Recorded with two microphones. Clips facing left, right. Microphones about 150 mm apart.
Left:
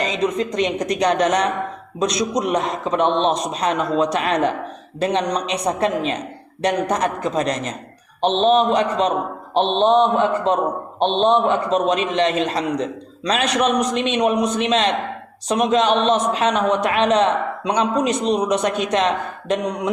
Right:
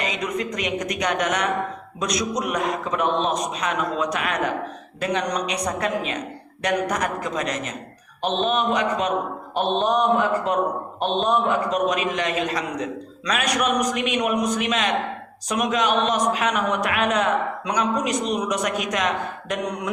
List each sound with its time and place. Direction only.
0.0 s a man's voice: 30° left (ahead or behind)